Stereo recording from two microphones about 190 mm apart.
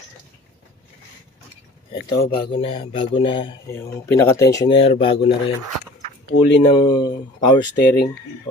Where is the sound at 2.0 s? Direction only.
55° left (ahead or behind).